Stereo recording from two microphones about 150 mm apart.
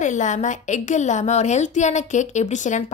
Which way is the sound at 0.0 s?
55° left (ahead or behind).